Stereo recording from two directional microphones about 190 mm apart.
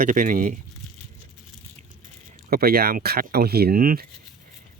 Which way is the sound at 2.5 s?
50° right (ahead or behind).